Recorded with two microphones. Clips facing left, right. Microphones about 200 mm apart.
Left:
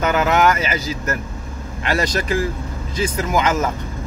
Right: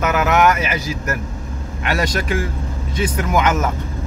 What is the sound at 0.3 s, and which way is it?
Speech, 30° left (ahead or behind).